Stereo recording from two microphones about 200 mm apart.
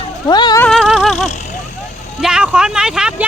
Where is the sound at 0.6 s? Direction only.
Centre (ahead or behind).